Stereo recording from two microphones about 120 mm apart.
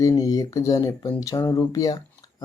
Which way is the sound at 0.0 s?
30° left (ahead or behind).